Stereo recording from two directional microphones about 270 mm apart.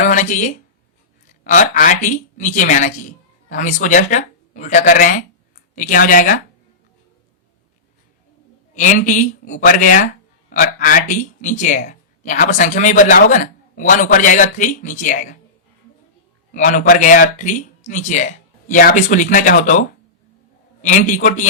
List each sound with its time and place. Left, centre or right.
0.0 s a sound: left
1.3 s a woman's voice: left
8.7 s a man's voice: left
16.5 s a man's voice: left
20.8 s a man's voice: left